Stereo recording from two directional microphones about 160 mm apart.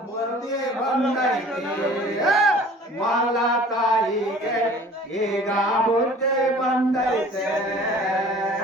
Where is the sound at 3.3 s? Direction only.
Centre (ahead or behind).